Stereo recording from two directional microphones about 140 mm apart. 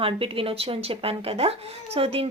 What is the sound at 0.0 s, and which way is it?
A woman's voice, 40° right (ahead or behind).